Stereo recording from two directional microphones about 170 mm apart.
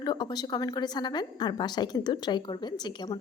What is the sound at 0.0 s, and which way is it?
A woman's voice, 25° left (ahead or behind).